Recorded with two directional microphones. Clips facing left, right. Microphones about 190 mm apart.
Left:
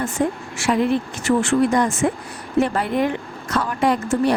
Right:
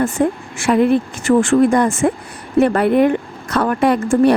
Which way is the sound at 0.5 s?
55° right (ahead or behind).